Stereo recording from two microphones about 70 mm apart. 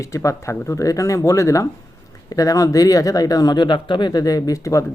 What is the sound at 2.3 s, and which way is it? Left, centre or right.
Speech, left.